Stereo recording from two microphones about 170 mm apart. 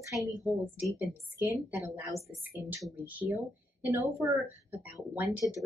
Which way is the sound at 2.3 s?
15° right (ahead or behind).